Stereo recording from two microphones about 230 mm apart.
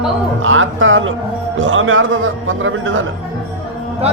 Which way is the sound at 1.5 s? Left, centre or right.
Right.